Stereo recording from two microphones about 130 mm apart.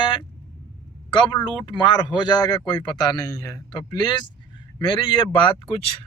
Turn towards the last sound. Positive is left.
turn(degrees=40)  # may be behind; listen again after turning